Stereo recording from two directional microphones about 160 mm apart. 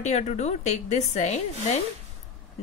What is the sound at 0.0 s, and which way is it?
A woman's voice, 45° left (ahead or behind).